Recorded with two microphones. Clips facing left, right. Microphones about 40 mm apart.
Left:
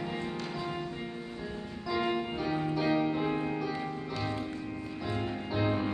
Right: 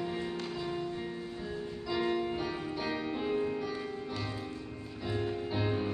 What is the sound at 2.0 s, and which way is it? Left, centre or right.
Music, centre.